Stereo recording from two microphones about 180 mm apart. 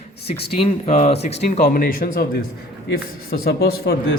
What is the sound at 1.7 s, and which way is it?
Speech, 50° left (ahead or behind).